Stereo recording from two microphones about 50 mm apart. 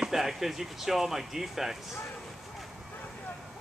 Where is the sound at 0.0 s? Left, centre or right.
Centre.